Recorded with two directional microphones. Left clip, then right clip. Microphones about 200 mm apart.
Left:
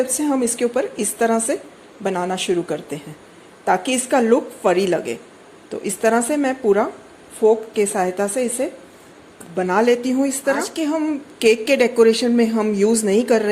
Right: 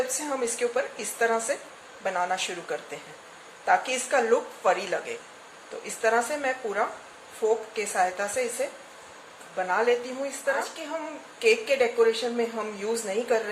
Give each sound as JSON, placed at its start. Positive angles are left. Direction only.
{"t": 0.3, "sound": "a woman's voice", "side_deg": 35}